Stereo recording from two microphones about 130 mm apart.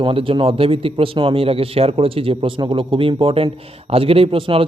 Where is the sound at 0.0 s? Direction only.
45° right (ahead or behind).